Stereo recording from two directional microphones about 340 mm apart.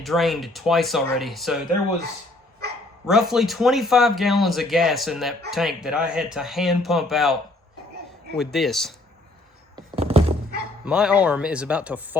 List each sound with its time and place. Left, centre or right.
0.0 s speech: centre
3.1 s speech: centre
8.4 s speech: centre
9.7 s thunk: centre
10.8 s speech: centre